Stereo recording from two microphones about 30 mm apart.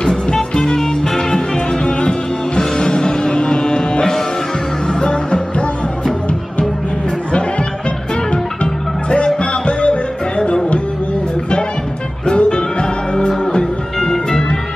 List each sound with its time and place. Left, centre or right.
0.0 s music: left
1.9 s music: left
9.4 s music: left
12.4 s music: left
13.9 s music: centre